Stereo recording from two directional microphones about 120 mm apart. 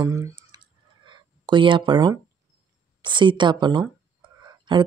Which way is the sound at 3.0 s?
40° right (ahead or behind).